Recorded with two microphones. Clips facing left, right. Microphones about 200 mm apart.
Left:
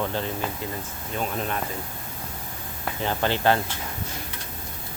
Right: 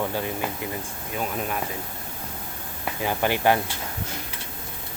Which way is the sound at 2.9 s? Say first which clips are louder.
Right 1 dB; 10° right (ahead or behind).